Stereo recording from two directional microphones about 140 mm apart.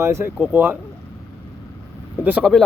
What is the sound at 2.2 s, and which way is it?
Speech, 10° right (ahead or behind).